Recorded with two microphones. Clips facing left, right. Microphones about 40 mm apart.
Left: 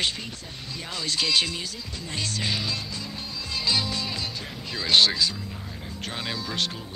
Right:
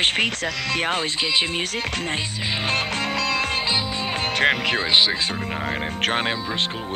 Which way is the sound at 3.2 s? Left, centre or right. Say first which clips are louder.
Right 11 dB; right.